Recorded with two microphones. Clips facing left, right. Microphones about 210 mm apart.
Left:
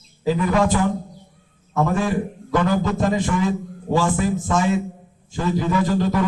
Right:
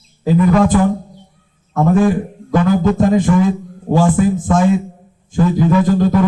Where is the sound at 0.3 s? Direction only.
50° right (ahead or behind).